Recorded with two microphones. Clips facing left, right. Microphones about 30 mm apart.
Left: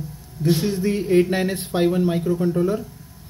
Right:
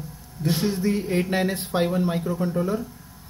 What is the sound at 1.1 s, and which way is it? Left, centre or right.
Speech, centre.